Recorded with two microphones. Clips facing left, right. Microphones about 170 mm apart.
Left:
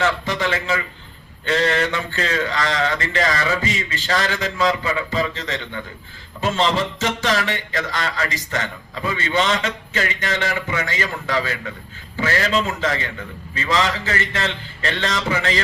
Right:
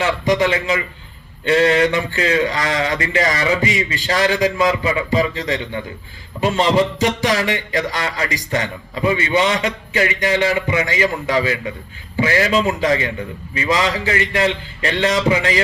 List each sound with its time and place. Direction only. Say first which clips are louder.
0.0 s a man's voice: right 5 dB; 15° right (ahead or behind)